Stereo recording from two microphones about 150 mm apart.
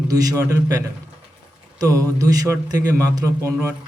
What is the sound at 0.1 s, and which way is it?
A man's voice, 25° right (ahead or behind).